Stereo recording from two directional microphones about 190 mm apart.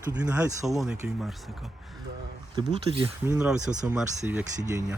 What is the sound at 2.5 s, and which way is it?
Speech, 25° right (ahead or behind).